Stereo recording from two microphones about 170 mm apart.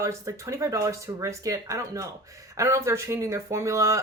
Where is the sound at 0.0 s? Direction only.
15° right (ahead or behind).